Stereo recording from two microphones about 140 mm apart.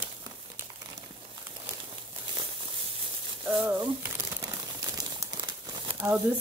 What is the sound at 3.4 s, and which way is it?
Crumpling, 10° right (ahead or behind).